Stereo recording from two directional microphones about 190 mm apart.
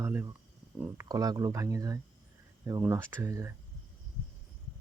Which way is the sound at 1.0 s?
20° right (ahead or behind).